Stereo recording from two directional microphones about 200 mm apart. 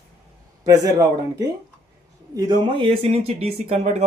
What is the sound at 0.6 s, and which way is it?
A man's voice, 20° right (ahead or behind).